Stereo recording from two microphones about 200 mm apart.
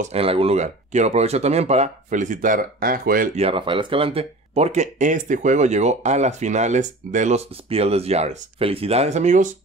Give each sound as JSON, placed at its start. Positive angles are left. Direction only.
{"t": 0.0, "sound": "speech", "side_deg": -30}
{"t": 3.3, "sound": "speech", "side_deg": -30}